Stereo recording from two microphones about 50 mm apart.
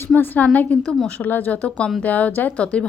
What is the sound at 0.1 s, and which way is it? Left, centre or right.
Speech, left.